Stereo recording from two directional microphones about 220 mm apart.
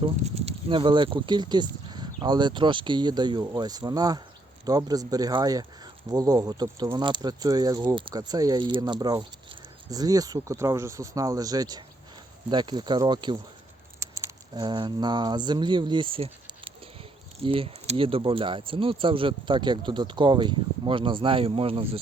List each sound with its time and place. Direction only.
0.0 s speech: 30° right (ahead or behind)